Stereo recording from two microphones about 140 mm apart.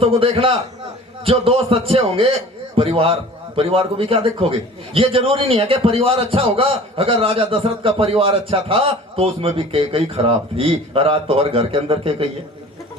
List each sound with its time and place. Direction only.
0.0 s a man's voice: 45° right (ahead or behind)